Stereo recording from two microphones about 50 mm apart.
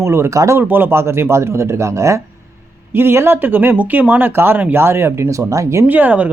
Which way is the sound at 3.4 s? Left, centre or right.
Right.